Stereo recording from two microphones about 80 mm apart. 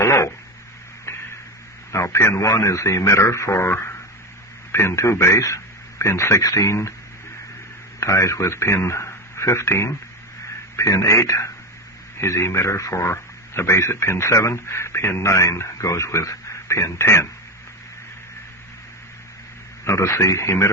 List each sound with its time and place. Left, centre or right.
0.0 s a sound: left
1.9 s speech: left
7.9 s a man's voice: left
19.8 s speech: left